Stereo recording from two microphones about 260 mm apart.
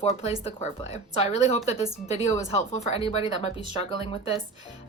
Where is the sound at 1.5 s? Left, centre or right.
Left.